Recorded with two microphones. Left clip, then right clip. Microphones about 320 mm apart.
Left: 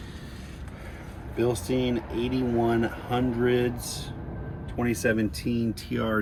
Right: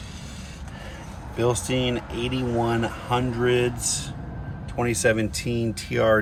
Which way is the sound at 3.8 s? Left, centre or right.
Centre.